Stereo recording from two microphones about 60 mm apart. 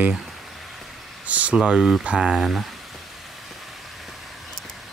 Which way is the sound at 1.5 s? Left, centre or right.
Centre.